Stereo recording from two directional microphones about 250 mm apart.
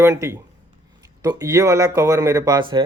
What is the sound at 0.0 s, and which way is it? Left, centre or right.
Speech, centre.